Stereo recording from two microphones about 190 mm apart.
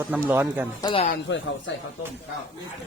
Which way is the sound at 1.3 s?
75° left (ahead or behind).